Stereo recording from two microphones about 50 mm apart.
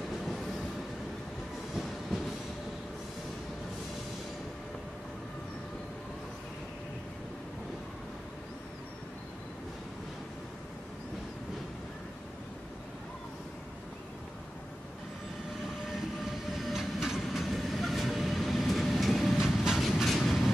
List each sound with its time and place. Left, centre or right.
0.2 s train: centre
1.8 s train: centre
16.5 s train: centre